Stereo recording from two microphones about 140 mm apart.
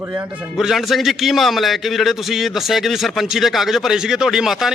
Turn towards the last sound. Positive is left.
turn(degrees=0)  # may be behind; listen again after turning